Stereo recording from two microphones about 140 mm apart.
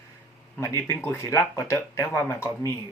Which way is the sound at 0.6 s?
20° left (ahead or behind).